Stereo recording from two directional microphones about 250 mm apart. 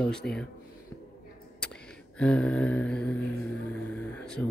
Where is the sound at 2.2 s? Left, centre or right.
Centre.